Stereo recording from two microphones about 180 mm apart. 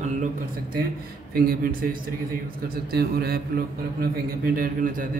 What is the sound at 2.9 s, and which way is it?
A man's voice, 60° right (ahead or behind).